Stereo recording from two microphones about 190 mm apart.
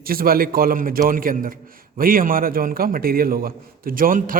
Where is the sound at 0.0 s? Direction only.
50° right (ahead or behind).